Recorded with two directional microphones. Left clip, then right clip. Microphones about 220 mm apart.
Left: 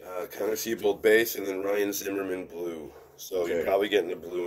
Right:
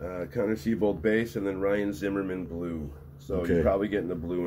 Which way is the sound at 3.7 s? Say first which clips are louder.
Left 3 dB; 35° left (ahead or behind).